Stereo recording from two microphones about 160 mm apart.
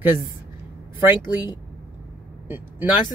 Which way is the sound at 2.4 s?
15° right (ahead or behind).